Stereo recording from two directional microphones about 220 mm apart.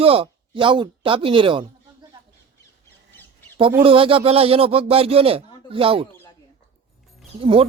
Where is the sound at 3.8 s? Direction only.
25° right (ahead or behind).